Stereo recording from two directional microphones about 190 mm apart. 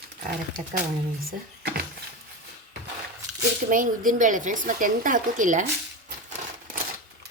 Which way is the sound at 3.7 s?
45° right (ahead or behind).